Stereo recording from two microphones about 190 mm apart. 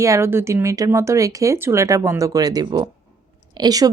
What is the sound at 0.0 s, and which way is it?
Speech, 15° right (ahead or behind).